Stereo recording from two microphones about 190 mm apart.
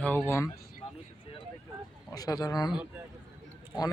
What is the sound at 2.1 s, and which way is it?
Speech, 20° left (ahead or behind).